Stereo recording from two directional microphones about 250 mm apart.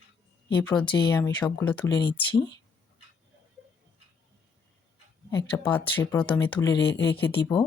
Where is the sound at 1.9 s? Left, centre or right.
Left.